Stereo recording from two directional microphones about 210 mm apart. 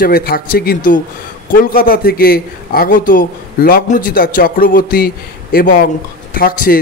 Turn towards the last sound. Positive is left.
turn(degrees=45)  # may be behind; listen again after turning